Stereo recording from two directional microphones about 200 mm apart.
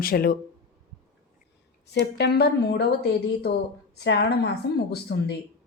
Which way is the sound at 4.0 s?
55° left (ahead or behind).